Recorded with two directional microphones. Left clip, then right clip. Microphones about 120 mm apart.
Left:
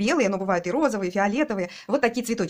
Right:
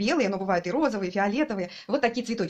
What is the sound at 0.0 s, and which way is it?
Speech, 40° left (ahead or behind).